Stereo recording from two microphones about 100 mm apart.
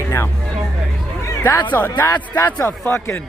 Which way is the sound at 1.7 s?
20° left (ahead or behind).